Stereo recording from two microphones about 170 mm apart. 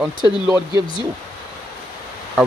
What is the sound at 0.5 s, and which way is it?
Speech, 20° right (ahead or behind).